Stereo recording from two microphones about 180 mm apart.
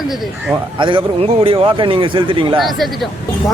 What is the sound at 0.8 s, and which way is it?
A man's voice, 25° right (ahead or behind).